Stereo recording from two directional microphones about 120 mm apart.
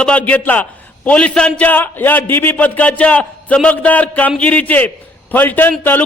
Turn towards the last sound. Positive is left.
turn(degrees=15)  # may be behind; listen again after turning